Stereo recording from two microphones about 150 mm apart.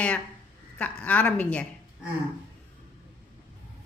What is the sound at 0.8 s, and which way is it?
Speech, 10° left (ahead or behind).